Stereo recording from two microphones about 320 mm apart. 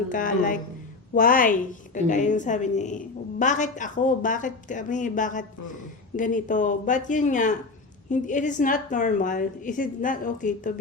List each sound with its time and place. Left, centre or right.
0.1 s a woman's voice: left